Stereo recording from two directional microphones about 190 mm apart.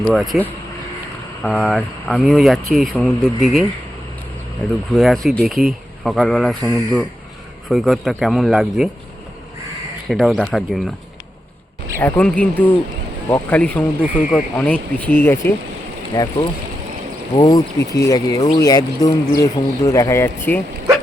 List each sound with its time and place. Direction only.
0.0 s speech: centre (ahead or behind)
4.9 s speech: centre (ahead or behind)
10.1 s speech: centre (ahead or behind)
11.9 s speech: 10° left (ahead or behind)
14.1 s speech: 5° right (ahead or behind)
14.6 s speech: 10° left (ahead or behind)
17.3 s speech: 20° left (ahead or behind)